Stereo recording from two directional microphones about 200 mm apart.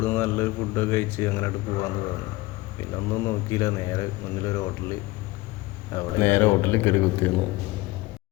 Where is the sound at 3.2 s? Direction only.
15° left (ahead or behind).